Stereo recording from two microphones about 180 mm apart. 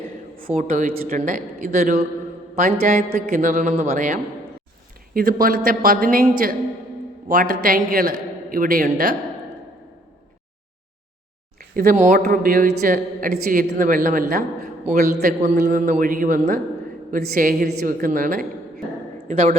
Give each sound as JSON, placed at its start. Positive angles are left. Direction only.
{"t": 0.4, "sound": "a man's voice", "side_deg": -50}
{"t": 11.8, "sound": "a man's voice", "side_deg": -45}
{"t": 12.2, "sound": "a man's voice", "side_deg": -55}
{"t": 15.4, "sound": "a man's voice", "side_deg": -40}